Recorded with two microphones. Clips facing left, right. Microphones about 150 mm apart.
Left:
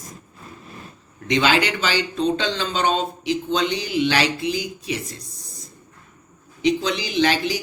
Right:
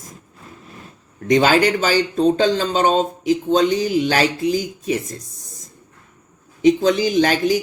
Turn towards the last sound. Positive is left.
turn(degrees=-50)  # may be behind; listen again after turning